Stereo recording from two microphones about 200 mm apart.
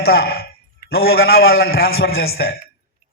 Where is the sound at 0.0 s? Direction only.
50° left (ahead or behind).